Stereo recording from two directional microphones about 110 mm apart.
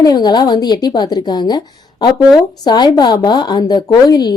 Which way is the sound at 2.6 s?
40° left (ahead or behind).